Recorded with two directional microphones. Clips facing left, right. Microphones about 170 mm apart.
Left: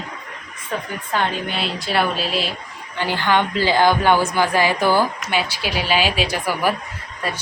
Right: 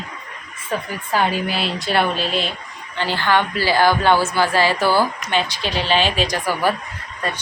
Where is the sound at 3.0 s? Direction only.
15° left (ahead or behind).